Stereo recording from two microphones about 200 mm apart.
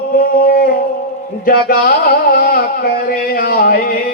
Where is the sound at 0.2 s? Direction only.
50° left (ahead or behind).